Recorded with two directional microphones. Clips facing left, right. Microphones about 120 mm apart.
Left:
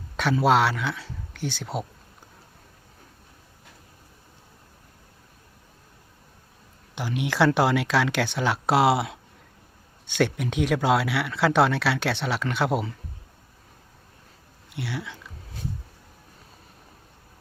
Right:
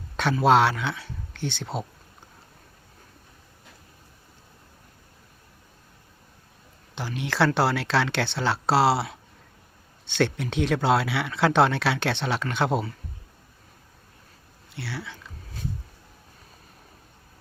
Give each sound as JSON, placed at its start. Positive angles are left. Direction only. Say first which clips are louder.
{"t": 0.4, "sound": "speech", "louder": "right 2 dB", "side_deg": 0}
{"t": 6.9, "sound": "speech", "louder": "left 2 dB", "side_deg": 10}
{"t": 14.8, "sound": "speech", "louder": "left 3 dB", "side_deg": 15}